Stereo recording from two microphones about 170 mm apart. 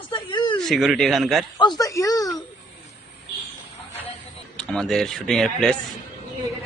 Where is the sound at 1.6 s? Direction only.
25° left (ahead or behind).